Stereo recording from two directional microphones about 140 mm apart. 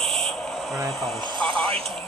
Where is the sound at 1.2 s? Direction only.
35° right (ahead or behind).